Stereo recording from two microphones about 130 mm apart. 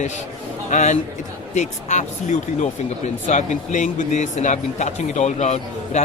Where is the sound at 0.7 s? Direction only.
75° left (ahead or behind).